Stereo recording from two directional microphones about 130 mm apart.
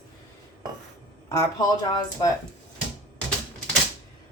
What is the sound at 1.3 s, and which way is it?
Speech, 30° left (ahead or behind).